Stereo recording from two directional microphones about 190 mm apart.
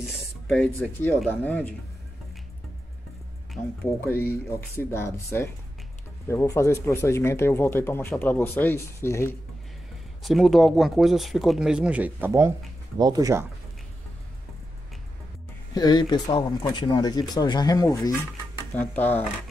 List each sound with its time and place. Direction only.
0.6 s speech: 5° left (ahead or behind)
4.2 s speech: 10° left (ahead or behind)
10.2 s speech: centre (ahead or behind); by 13.5 s 15° right (ahead or behind)
15.7 s speech: 20° left (ahead or behind)